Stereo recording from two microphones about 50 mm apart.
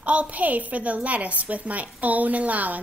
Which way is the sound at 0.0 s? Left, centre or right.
Right.